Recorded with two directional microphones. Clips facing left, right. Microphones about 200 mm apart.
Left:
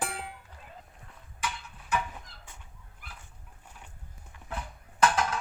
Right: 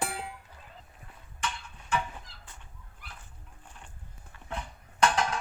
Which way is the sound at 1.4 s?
5° left (ahead or behind).